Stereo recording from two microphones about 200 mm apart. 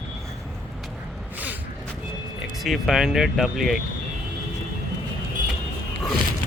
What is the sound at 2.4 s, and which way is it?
Speech, centre (ahead or behind).